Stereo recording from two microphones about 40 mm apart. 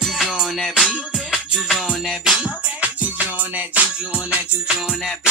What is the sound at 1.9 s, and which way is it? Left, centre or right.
Music, centre.